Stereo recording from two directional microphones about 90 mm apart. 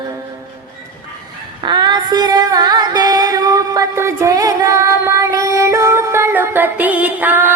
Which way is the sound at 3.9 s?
35° right (ahead or behind).